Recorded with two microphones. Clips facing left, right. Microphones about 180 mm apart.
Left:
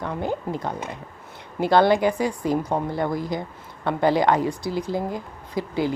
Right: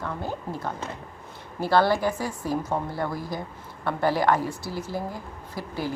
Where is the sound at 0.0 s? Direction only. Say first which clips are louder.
Left 5 dB; 20° left (ahead or behind).